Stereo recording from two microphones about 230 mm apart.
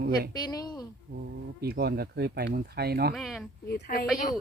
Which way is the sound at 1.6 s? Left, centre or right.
Right.